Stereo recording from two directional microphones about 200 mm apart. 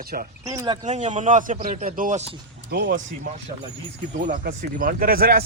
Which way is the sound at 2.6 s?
55° right (ahead or behind).